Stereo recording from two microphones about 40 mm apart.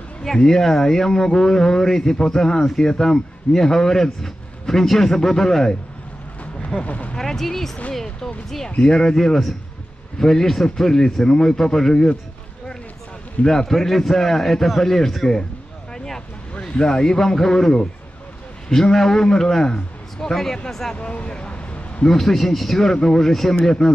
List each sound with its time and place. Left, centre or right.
0.2 s a man's voice: centre
6.8 s speech: left
7.2 s a man's voice: centre
13.5 s a man's voice: centre
16.5 s a man's voice: centre
20.9 s a sound: left
22.0 s a man's voice: centre